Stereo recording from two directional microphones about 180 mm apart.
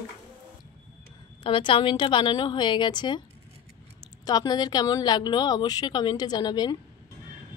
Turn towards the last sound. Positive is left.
turn(degrees=25)  # may be behind; listen again after turning